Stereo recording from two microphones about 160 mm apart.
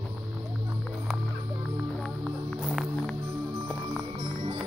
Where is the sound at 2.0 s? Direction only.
Centre (ahead or behind).